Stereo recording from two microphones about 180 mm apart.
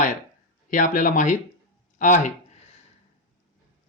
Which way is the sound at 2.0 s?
45° left (ahead or behind).